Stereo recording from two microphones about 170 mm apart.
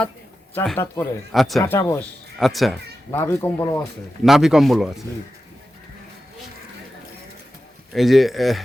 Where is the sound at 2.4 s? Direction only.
Centre (ahead or behind).